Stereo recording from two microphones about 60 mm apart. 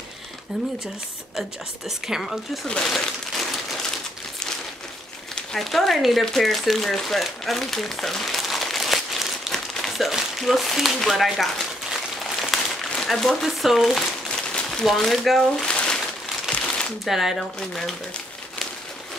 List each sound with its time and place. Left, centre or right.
1.9 s speech: centre
2.6 s speech: centre
5.3 s speech: centre
9.5 s crumpling: centre
13.4 s speech: centre
15.5 s a sound: centre
16.4 s shuffling cards: centre
17.0 s speech: centre
17.6 s speech: centre